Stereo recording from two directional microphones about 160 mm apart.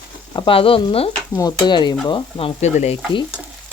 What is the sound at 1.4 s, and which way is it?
Stir, 25° left (ahead or behind).